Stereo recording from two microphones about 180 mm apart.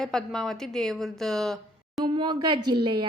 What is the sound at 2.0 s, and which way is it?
Speech, 25° right (ahead or behind).